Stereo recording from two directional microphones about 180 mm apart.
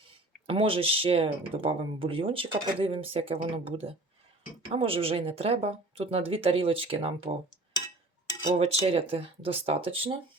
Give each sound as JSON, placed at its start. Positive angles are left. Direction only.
{"t": 0.4, "sound": "speech", "side_deg": -30}
{"t": 8.5, "sound": "speech", "side_deg": -35}